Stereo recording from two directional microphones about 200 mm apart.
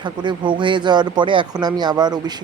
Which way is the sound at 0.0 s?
25° right (ahead or behind).